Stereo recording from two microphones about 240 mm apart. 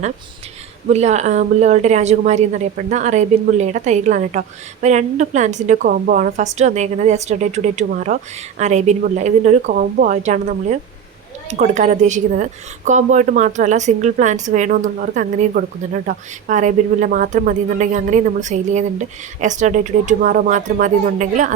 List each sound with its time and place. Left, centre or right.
0.9 s a woman's voice: right